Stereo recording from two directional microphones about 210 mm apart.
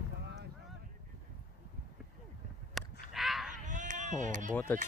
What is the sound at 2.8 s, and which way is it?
Whip, centre (ahead or behind).